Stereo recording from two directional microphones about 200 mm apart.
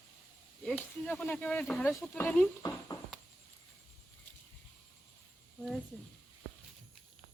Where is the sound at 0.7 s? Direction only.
5° left (ahead or behind).